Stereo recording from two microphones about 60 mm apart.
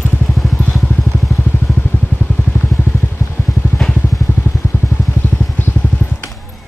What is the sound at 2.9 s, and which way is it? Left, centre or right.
Vehicle, left.